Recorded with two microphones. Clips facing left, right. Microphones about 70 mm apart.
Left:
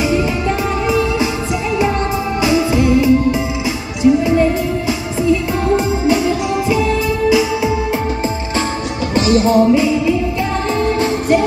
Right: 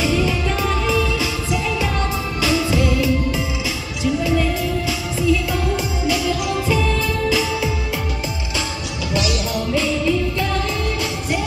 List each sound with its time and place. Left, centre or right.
0.0 s music: left
6.5 s music: centre
9.1 s music: left
9.7 s music: centre
10.7 s music: left